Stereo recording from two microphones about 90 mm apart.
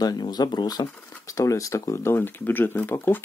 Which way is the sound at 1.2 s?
40° left (ahead or behind).